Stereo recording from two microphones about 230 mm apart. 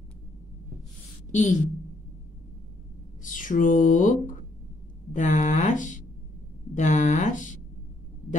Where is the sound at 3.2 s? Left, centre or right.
Left.